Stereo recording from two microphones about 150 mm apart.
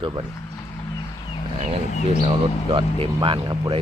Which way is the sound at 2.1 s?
35° right (ahead or behind).